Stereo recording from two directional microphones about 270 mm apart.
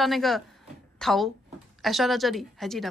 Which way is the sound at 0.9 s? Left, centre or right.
Centre.